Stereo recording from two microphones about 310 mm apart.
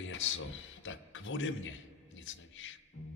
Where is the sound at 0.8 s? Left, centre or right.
Left.